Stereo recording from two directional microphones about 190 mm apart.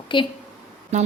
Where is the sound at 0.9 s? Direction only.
35° right (ahead or behind).